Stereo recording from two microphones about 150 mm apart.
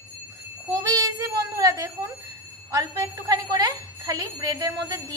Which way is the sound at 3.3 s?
25° right (ahead or behind).